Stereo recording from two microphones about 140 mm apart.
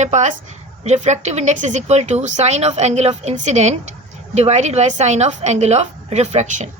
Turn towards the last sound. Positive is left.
turn(degrees=-55)  # may be behind; listen again after turning